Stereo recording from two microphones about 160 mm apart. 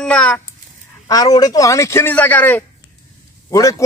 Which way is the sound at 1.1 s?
25° left (ahead or behind).